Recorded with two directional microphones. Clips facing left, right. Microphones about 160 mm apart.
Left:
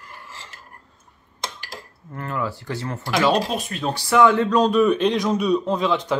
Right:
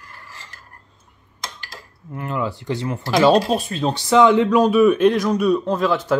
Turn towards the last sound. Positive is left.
turn(degrees=-5)  # may be behind; listen again after turning